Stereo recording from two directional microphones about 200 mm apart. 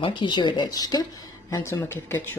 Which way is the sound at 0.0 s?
25° left (ahead or behind).